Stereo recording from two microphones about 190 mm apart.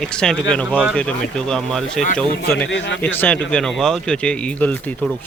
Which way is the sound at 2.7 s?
75° left (ahead or behind).